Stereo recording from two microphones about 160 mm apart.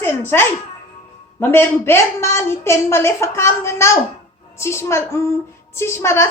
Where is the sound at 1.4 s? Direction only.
15° left (ahead or behind).